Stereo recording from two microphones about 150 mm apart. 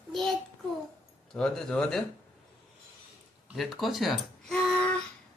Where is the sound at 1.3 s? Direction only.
5° left (ahead or behind).